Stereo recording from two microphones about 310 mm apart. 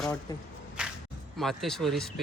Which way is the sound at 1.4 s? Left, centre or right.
Centre.